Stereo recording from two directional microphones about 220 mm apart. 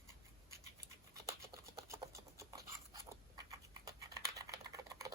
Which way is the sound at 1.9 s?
15° right (ahead or behind).